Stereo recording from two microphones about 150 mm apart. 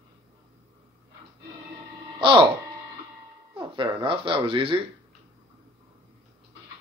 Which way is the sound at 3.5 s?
35° right (ahead or behind).